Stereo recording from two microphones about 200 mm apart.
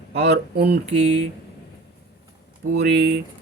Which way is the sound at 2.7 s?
60° right (ahead or behind).